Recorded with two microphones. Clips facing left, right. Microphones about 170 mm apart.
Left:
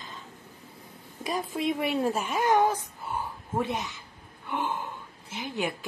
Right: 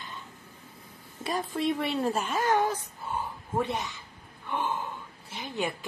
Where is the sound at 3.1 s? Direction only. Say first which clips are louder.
Even; 15° left (ahead or behind).